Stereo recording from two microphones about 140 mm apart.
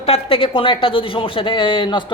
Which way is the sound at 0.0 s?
40° left (ahead or behind).